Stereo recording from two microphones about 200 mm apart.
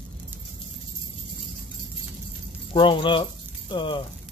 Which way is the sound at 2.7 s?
25° left (ahead or behind).